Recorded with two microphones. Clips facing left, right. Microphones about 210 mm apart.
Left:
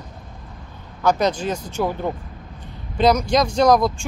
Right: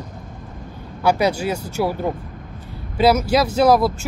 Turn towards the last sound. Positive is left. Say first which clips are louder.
# right 1 dB
turn(degrees=-5)  # may be behind; listen again after turning